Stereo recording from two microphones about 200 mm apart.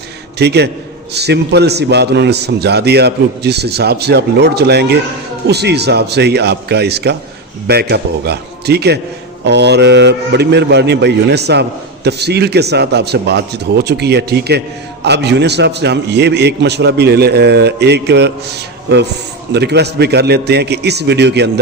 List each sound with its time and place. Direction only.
0.3 s a man's voice: 55° right (ahead or behind)